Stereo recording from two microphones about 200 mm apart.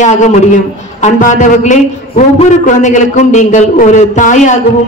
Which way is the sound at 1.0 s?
35° left (ahead or behind).